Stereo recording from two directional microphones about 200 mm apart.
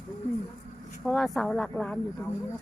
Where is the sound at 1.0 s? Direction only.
Centre (ahead or behind).